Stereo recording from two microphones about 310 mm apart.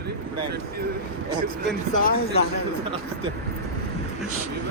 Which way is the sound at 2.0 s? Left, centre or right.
Left.